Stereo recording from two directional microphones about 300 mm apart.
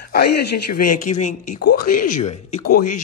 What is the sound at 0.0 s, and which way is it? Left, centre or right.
A man's voice, left.